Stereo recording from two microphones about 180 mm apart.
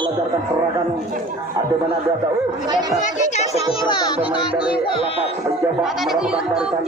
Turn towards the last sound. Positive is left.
turn(degrees=-5)  # may be behind; listen again after turning